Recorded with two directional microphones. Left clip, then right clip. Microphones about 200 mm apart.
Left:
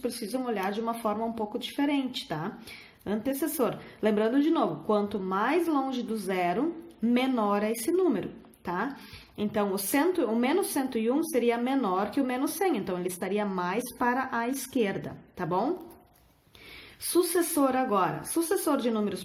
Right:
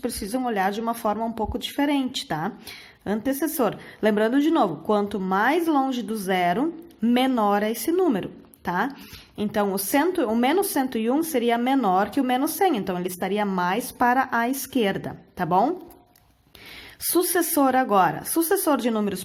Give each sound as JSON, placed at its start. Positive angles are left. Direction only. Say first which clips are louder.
{"t": 0.0, "sound": "speech", "louder": "right 5 dB", "side_deg": -45}
{"t": 17.1, "sound": "speech", "louder": "right 3 dB", "side_deg": -45}